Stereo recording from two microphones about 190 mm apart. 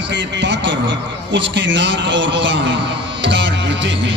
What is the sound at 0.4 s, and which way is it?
A man's voice, 70° right (ahead or behind).